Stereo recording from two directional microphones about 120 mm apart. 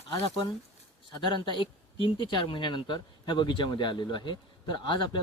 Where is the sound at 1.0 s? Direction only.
45° left (ahead or behind).